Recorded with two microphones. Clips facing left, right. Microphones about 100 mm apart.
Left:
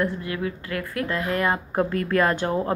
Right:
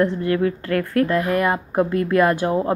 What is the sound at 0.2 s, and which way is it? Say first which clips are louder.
Speech: right 9 dB; 45° right (ahead or behind).